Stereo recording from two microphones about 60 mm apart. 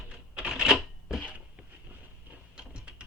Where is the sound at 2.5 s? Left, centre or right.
Centre.